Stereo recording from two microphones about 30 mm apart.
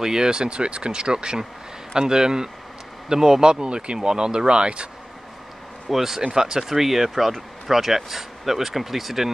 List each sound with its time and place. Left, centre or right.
0.0 s speech: right
5.9 s speech: centre
6.3 s speech: right
6.6 s speech: centre